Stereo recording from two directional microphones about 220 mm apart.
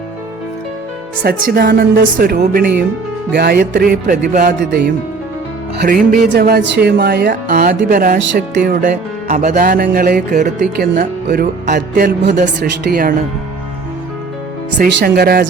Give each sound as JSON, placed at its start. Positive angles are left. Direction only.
{"t": 1.2, "sound": "speech", "side_deg": -45}
{"t": 8.2, "sound": "speech", "side_deg": -55}
{"t": 8.6, "sound": "speech", "side_deg": -40}
{"t": 14.8, "sound": "speech", "side_deg": -45}